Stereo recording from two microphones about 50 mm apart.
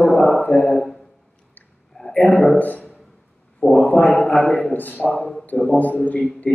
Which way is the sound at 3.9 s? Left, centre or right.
Centre.